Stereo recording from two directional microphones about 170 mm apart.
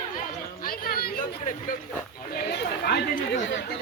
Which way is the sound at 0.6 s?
60° left (ahead or behind).